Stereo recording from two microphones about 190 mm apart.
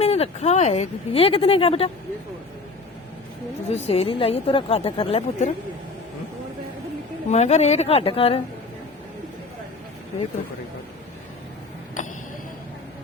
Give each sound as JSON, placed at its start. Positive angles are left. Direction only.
{"t": 0.0, "sound": "speech", "side_deg": 35}
{"t": 3.7, "sound": "speech", "side_deg": 35}
{"t": 7.3, "sound": "speech", "side_deg": 35}